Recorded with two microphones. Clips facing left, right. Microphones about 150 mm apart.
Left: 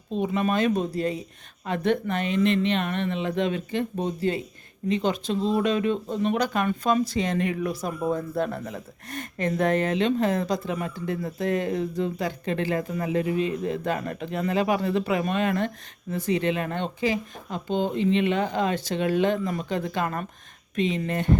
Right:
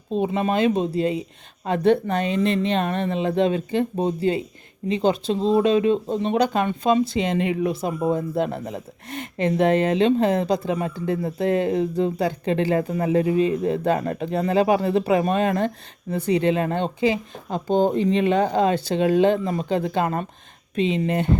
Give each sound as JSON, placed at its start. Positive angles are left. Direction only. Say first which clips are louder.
{"t": 0.1, "sound": "speech", "louder": "right 3 dB", "side_deg": -30}
{"t": 17.7, "sound": "speech", "louder": "right 5 dB", "side_deg": -40}